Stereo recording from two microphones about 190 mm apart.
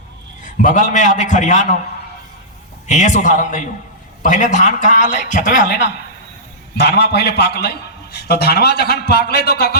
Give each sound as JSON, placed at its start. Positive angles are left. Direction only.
{"t": 0.4, "sound": "a man's voice", "side_deg": 45}
{"t": 2.8, "sound": "a man's voice", "side_deg": 40}
{"t": 6.7, "sound": "a man's voice", "side_deg": 60}